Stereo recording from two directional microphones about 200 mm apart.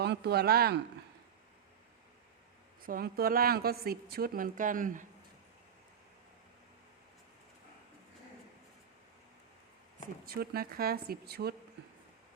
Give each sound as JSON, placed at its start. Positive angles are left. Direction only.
{"t": 0.0, "sound": "speech", "side_deg": -55}
{"t": 2.8, "sound": "speech", "side_deg": -45}
{"t": 10.2, "sound": "speech", "side_deg": -50}